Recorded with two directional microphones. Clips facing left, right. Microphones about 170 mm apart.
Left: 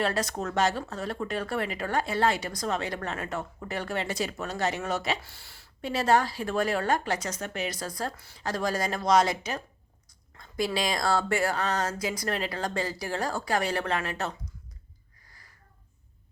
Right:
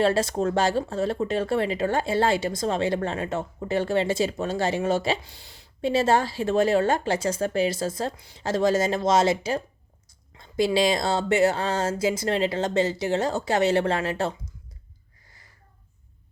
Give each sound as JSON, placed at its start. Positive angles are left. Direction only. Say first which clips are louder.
{"t": 0.0, "sound": "speech", "louder": "right 7 dB", "side_deg": -30}
{"t": 5.2, "sound": "speech", "louder": "right 3 dB", "side_deg": -20}